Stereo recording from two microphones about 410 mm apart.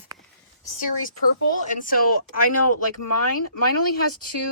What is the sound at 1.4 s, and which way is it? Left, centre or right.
Speech, left.